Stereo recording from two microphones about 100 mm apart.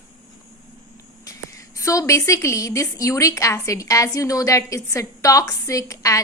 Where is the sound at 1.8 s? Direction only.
30° left (ahead or behind).